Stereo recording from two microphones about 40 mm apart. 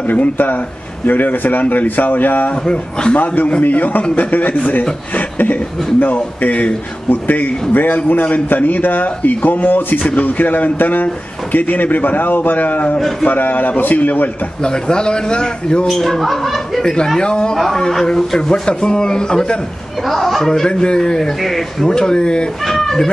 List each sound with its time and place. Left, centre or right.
0.0 s a man's voice: left
2.5 s a man's voice: left
3.6 s a man's voice: left
5.1 s a sound: left
5.9 s a man's voice: left
7.1 s a man's voice: left
14.6 s a man's voice: left
15.9 s speech: centre
16.8 s a man's voice: centre
20.0 s speech: centre
20.6 s a man's voice: left; by 21.8 s centre
21.8 s a man's voice: centre
22.6 s speech: centre